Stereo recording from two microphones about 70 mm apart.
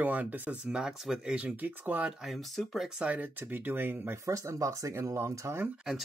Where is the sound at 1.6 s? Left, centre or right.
Right.